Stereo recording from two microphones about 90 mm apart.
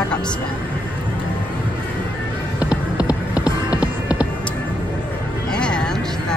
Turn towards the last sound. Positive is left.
turn(degrees=10)  # may be behind; listen again after turning